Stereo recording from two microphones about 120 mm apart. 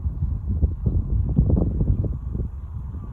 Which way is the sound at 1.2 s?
25° left (ahead or behind).